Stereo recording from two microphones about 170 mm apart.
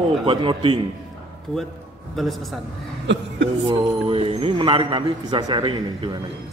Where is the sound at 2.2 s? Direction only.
Centre (ahead or behind).